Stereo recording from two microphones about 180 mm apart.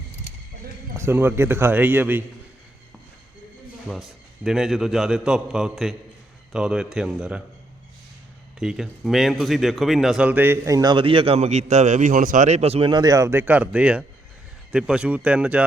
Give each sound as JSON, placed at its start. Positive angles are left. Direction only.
{"t": 0.9, "sound": "speech", "side_deg": -15}
{"t": 3.8, "sound": "a man's voice", "side_deg": 0}
{"t": 8.5, "sound": "speech", "side_deg": -5}